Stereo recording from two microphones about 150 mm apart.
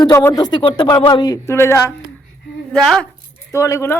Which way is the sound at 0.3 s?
30° left (ahead or behind).